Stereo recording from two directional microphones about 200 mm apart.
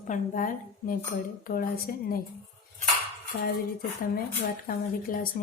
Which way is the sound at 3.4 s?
50° left (ahead or behind).